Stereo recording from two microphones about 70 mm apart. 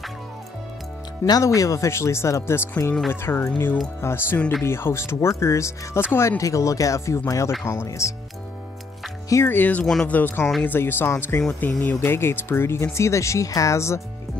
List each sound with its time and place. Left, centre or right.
1.4 s speech: left
9.5 s speech: left